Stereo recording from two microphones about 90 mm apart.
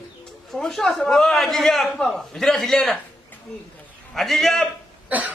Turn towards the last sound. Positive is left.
turn(degrees=-15)  # may be behind; listen again after turning